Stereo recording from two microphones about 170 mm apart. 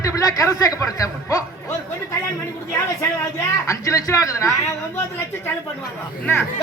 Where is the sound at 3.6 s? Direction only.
20° left (ahead or behind).